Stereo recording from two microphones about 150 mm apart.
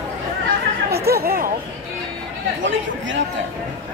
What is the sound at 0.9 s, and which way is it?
Chatter, 90° right.